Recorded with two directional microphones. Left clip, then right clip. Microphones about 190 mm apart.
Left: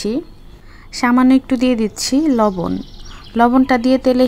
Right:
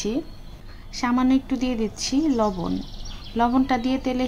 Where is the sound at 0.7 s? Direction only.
40° left (ahead or behind).